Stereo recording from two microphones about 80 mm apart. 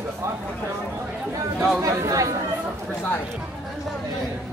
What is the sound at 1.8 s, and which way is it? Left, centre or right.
Speech, right.